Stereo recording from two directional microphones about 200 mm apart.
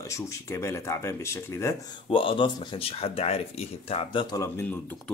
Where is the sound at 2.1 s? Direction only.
25° left (ahead or behind).